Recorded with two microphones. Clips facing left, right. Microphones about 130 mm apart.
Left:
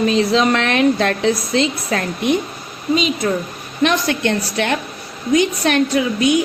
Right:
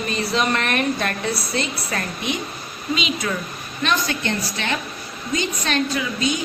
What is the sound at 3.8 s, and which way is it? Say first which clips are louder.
A woman's voice: left 6 dB; 65° left (ahead or behind).